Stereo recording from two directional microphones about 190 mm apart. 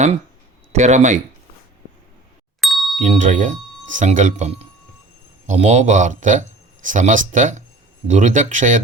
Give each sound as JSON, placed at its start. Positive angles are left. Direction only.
{"t": 0.7, "sound": "speech", "side_deg": -35}
{"t": 2.6, "sound": "ding", "side_deg": 0}
{"t": 3.0, "sound": "speech", "side_deg": -40}